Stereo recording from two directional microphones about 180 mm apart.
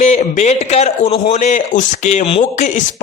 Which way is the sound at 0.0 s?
40° left (ahead or behind).